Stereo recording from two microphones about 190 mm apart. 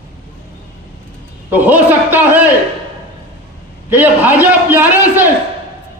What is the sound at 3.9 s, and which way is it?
A man's voice, 10° right (ahead or behind).